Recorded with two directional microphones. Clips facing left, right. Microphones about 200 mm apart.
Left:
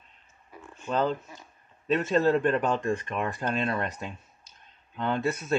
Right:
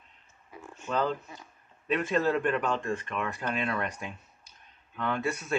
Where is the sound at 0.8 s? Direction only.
20° left (ahead or behind); by 3.4 s 40° left (ahead or behind).